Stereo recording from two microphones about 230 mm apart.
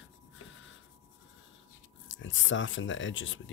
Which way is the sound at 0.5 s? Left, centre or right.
Left.